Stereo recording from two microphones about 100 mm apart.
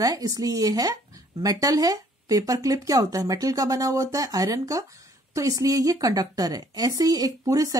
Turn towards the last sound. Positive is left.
turn(degrees=-40)  # may be behind; listen again after turning